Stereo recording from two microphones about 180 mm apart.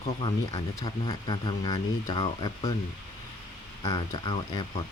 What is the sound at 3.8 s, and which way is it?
Speech, 25° left (ahead or behind).